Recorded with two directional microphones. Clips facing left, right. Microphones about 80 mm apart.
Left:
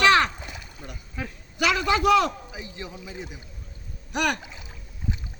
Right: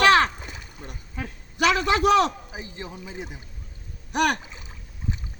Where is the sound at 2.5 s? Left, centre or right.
Right.